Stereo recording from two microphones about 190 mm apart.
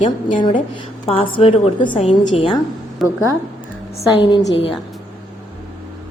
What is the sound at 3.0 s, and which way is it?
Speech, centre (ahead or behind).